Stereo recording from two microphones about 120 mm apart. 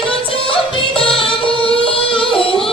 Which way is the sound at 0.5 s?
50° left (ahead or behind).